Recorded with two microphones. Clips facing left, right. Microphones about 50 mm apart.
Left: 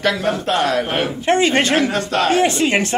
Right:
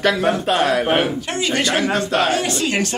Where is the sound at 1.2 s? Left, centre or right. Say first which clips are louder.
Left 5 dB; left.